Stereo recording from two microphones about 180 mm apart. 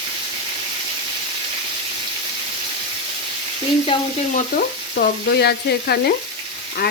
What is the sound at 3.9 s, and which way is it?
Speech, 30° left (ahead or behind).